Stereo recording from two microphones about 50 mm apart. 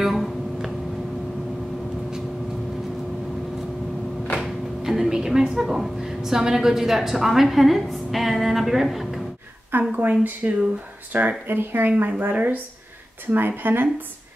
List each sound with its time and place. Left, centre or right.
0.0 s music: centre
4.4 s a sound: centre
5.6 s a woman's voice: centre
9.7 s speech: right
10.4 s speech: right
11.1 s speech: right
12.1 s speech: right